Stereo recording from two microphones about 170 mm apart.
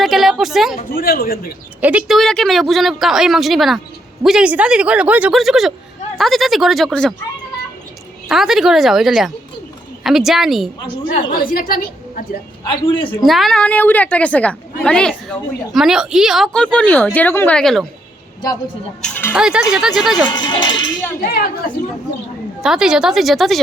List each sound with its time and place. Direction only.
0.0 s a sound: centre (ahead or behind)
0.8 s a woman's voice: 60° left (ahead or behind)
1.8 s a woman's voice: 10° right (ahead or behind)
8.3 s a woman's voice: centre (ahead or behind)
11.1 s a woman's voice: 55° left (ahead or behind)
12.6 s a man's voice: 30° left (ahead or behind)
13.2 s a woman's voice: centre (ahead or behind)
19.3 s a woman's voice: 5° right (ahead or behind)
20.2 s a man's voice: 25° left (ahead or behind)
21.2 s a woman's voice: 60° left (ahead or behind)
22.6 s a woman's voice: 5° right (ahead or behind)